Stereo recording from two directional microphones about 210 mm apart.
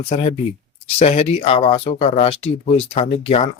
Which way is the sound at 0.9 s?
30° left (ahead or behind).